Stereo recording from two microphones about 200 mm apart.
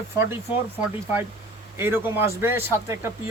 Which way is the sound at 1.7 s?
10° right (ahead or behind).